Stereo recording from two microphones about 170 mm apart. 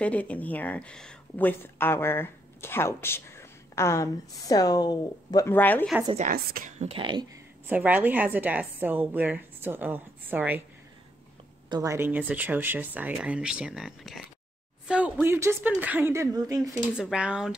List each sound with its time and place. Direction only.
0.0 s speech: 10° left (ahead or behind)
6.3 s a woman's voice: 60° right (ahead or behind)
6.8 s speech: 30° right (ahead or behind)
7.6 s a woman's voice: 10° right (ahead or behind)
11.7 s a woman's voice: 20° right (ahead or behind)
16.9 s speech: 5° right (ahead or behind)